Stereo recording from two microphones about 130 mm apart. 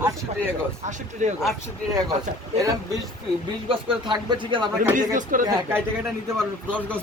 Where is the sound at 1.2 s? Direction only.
65° right (ahead or behind).